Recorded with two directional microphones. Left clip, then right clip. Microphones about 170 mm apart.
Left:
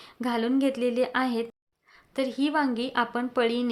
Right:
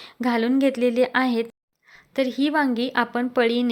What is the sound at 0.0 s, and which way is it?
A woman's voice, 20° right (ahead or behind).